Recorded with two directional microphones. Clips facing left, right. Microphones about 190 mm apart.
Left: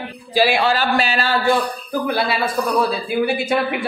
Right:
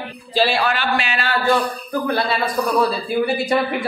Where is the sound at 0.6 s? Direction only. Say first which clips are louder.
Left 3 dB; 35° left (ahead or behind).